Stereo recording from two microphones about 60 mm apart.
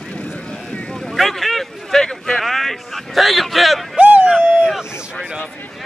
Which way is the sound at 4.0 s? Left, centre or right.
Right.